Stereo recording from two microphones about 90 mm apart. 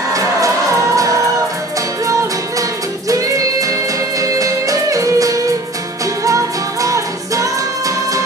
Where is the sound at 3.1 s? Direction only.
40° right (ahead or behind).